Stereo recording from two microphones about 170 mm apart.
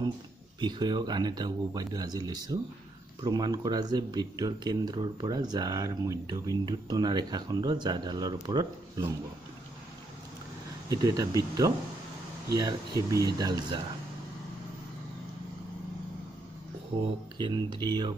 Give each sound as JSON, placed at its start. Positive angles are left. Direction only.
{"t": 0.6, "sound": "speech", "side_deg": -25}
{"t": 10.9, "sound": "speech", "side_deg": -20}
{"t": 17.4, "sound": "speech", "side_deg": -25}